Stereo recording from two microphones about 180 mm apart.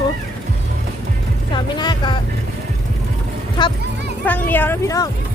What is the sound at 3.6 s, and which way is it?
Music, 25° left (ahead or behind).